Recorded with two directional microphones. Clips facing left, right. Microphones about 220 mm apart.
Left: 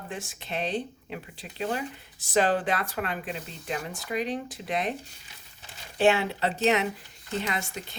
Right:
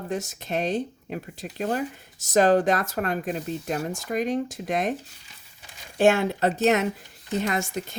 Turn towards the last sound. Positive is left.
turn(degrees=-45)  # may be behind; listen again after turning